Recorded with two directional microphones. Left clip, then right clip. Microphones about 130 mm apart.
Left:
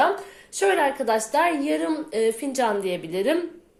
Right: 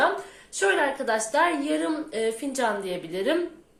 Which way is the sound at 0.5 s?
40° left (ahead or behind).